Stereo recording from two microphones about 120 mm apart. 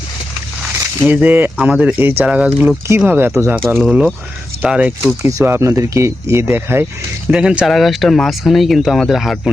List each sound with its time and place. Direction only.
1.0 s speech: 10° right (ahead or behind)
3.8 s speech: 5° right (ahead or behind)
5.3 s speech: 25° right (ahead or behind)
7.3 s speech: 10° right (ahead or behind)